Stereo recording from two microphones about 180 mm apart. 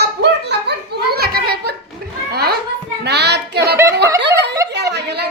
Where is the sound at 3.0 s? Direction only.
65° right (ahead or behind).